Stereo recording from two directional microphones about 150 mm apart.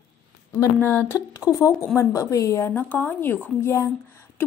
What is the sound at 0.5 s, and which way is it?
Speech, 15° left (ahead or behind).